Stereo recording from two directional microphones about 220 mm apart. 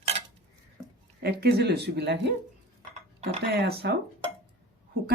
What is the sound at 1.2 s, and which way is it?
Speech, 45° right (ahead or behind).